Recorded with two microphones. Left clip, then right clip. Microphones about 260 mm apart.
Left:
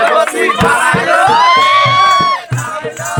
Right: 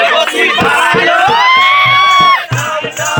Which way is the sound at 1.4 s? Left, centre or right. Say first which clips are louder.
Right 1 dB; centre.